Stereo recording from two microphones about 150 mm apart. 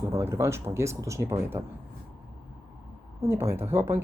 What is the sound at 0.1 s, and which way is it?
Speech, 20° right (ahead or behind).